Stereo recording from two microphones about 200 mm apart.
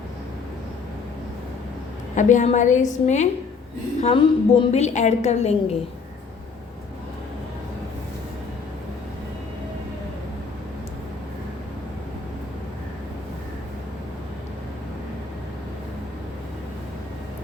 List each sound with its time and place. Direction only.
2.1 s a woman's voice: 35° left (ahead or behind)